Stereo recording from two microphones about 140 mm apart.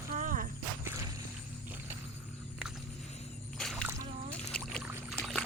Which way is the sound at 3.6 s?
5° left (ahead or behind).